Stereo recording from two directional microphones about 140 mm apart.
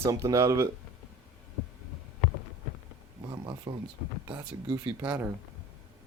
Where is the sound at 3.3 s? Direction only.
30° right (ahead or behind).